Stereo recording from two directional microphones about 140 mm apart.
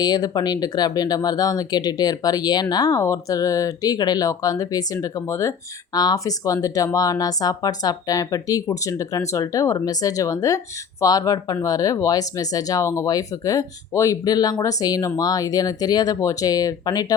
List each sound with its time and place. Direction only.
0.0 s speech: 30° left (ahead or behind)